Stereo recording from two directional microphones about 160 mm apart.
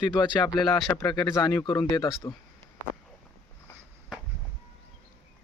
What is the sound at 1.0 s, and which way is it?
A man's voice, 25° left (ahead or behind).